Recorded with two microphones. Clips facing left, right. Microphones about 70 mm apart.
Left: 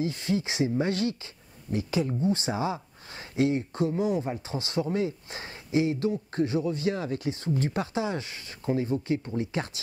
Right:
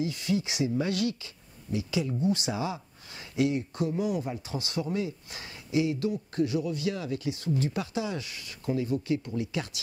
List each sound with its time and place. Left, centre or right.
0.0 s speech: left